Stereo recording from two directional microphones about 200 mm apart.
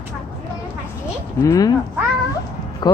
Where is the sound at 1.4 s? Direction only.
15° left (ahead or behind).